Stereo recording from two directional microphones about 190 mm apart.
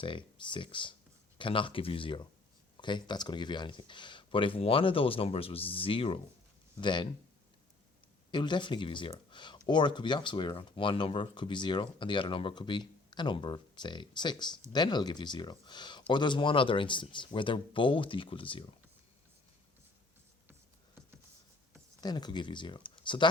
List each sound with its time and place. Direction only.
0.0 s speech: 25° left (ahead or behind)
8.3 s speech: 25° left (ahead or behind)
22.0 s speech: 20° left (ahead or behind)